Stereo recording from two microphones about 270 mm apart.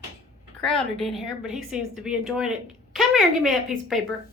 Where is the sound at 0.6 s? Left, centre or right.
Centre.